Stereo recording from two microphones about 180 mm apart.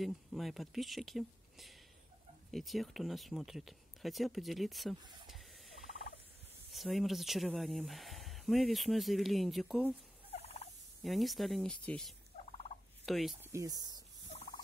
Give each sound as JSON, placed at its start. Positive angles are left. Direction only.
{"t": 0.0, "sound": "speech", "side_deg": 0}
{"t": 5.2, "sound": "printer", "side_deg": 0}
{"t": 6.7, "sound": "speech", "side_deg": 0}
{"t": 10.3, "sound": "fowl", "side_deg": 35}
{"t": 11.1, "sound": "speech", "side_deg": 0}
{"t": 13.4, "sound": "speech", "side_deg": -15}